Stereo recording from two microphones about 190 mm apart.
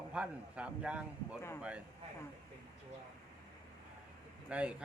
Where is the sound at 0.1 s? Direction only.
5° right (ahead or behind).